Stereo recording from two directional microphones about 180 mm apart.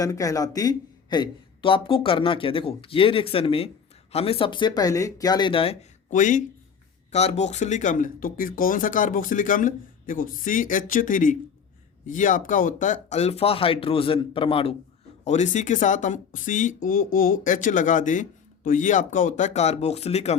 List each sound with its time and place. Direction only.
0.0 s speech: 20° left (ahead or behind)
6.1 s speech: 45° left (ahead or behind)